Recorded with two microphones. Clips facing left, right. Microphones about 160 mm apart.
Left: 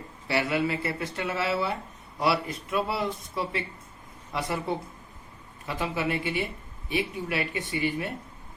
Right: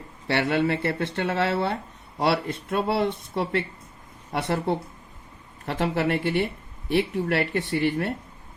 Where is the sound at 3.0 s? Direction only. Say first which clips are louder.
Right 5 dB; 30° right (ahead or behind).